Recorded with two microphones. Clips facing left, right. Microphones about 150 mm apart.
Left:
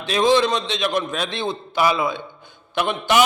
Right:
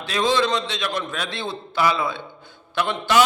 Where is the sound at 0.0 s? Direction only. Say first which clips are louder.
Left 4 dB; 20° left (ahead or behind).